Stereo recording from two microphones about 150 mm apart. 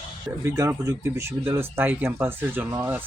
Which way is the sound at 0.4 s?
20° right (ahead or behind).